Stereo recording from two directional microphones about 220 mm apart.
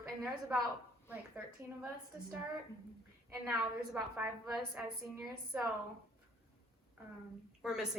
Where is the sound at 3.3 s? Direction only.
5° right (ahead or behind).